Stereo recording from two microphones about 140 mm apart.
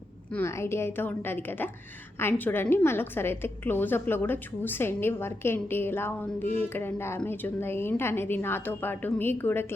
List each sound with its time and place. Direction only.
0.3 s a woman's voice: 15° left (ahead or behind)